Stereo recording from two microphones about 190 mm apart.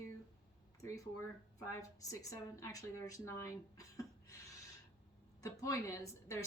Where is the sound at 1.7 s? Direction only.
15° left (ahead or behind).